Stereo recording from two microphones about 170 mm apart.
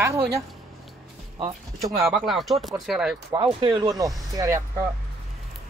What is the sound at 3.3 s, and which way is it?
Speech, 30° right (ahead or behind).